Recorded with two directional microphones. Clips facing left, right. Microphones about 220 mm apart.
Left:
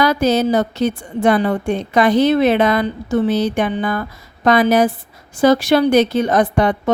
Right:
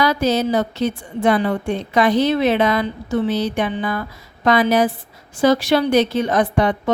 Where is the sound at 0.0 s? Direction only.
50° left (ahead or behind).